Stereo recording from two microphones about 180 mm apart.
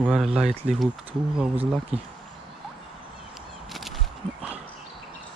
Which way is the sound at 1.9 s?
35° right (ahead or behind).